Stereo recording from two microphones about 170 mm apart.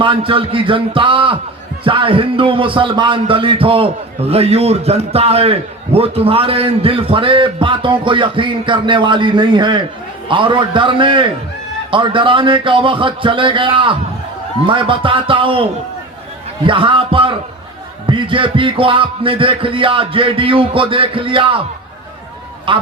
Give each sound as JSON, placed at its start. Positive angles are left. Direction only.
{"t": 0.0, "sound": "speech", "side_deg": -30}
{"t": 22.7, "sound": "speech", "side_deg": -30}